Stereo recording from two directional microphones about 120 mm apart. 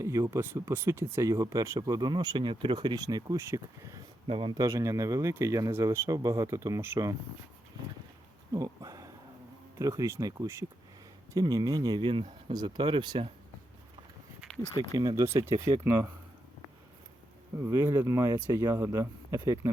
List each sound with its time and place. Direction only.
0.0 s speech: 25° right (ahead or behind)
4.3 s a man's voice: 45° right (ahead or behind)
4.6 s speech: 25° right (ahead or behind)
8.5 s a sound: 30° right (ahead or behind)
9.7 s speech: 30° right (ahead or behind)
14.6 s speech: 30° right (ahead or behind)
17.6 s speech: 20° right (ahead or behind)